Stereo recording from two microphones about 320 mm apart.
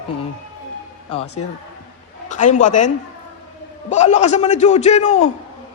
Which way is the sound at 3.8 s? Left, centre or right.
Left.